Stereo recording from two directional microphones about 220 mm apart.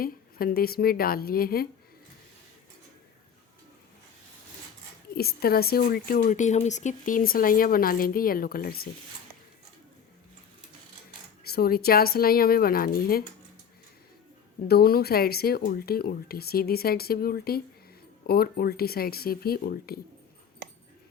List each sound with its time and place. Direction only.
0.0 s speech: 40° left (ahead or behind)
5.1 s speech: 45° left (ahead or behind)
11.4 s speech: 45° left (ahead or behind)
14.7 s speech: 45° left (ahead or behind)